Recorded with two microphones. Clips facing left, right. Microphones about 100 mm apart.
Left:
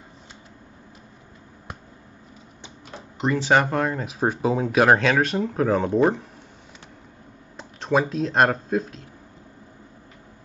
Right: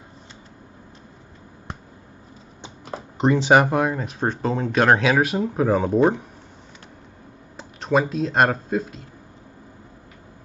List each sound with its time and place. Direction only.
2.9 s speech: 25° right (ahead or behind); by 4.0 s 10° right (ahead or behind)
4.0 s speech: 5° left (ahead or behind)
7.5 s speech: centre (ahead or behind)